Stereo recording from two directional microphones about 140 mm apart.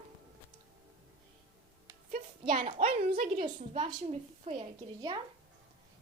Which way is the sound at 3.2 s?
85° right.